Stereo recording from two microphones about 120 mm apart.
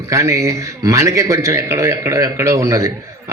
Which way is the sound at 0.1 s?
25° right (ahead or behind).